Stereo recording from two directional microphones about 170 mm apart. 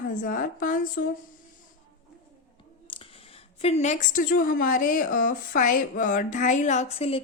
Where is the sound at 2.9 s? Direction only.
30° left (ahead or behind).